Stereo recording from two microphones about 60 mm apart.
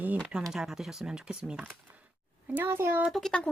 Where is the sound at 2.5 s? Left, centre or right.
Right.